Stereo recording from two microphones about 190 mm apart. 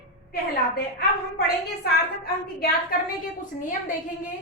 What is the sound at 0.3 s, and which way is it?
A woman's voice, 55° left (ahead or behind).